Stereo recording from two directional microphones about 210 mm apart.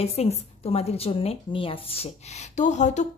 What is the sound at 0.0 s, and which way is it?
Speech, 30° left (ahead or behind).